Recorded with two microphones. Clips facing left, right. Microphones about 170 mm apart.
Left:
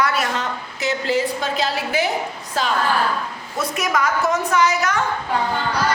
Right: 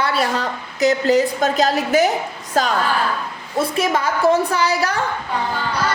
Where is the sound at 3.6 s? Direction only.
30° right (ahead or behind).